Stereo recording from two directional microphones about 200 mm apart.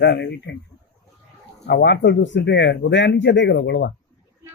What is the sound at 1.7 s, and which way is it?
Speech, 55° left (ahead or behind).